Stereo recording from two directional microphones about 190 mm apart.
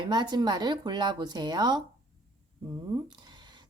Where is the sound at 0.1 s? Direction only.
20° right (ahead or behind).